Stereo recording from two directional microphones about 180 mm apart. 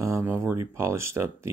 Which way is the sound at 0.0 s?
15° right (ahead or behind).